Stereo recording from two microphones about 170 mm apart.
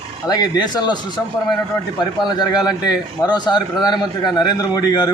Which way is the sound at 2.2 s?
25° left (ahead or behind).